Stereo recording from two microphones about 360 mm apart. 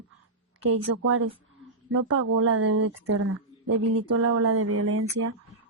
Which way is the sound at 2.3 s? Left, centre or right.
Right.